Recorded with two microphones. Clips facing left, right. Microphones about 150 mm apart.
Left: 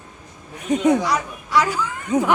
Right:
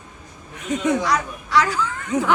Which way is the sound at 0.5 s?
35° left (ahead or behind).